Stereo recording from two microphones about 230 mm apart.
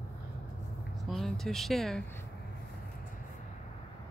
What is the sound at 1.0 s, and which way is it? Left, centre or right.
Speech, centre.